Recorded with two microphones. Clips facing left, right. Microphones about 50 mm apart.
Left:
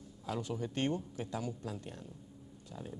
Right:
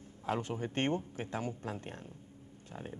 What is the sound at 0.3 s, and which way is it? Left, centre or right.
Speech, right.